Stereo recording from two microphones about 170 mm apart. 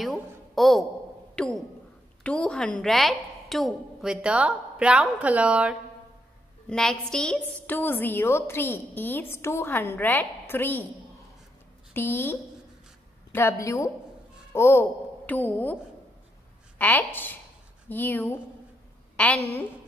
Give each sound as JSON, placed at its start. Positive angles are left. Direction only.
{"t": 0.0, "sound": "a sound", "side_deg": 0}
{"t": 1.3, "sound": "a woman's voice", "side_deg": 5}
{"t": 6.7, "sound": "a woman's voice", "side_deg": 5}
{"t": 11.9, "sound": "a woman's voice", "side_deg": 15}